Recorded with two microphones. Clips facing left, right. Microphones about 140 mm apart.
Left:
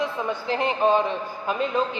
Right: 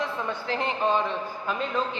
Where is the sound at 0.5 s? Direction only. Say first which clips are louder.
Left 5 dB; 15° left (ahead or behind).